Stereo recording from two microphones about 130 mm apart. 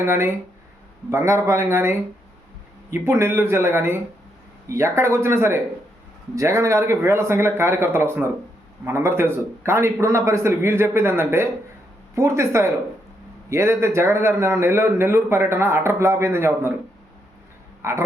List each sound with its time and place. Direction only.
0.0 s speech: 20° right (ahead or behind)
17.8 s speech: 20° right (ahead or behind)